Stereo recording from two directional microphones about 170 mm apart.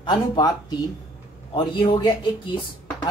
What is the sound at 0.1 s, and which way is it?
Speech, 25° left (ahead or behind).